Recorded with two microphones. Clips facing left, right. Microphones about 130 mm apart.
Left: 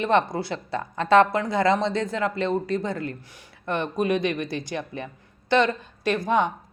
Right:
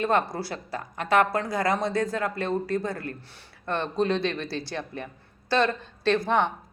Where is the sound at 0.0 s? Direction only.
20° left (ahead or behind).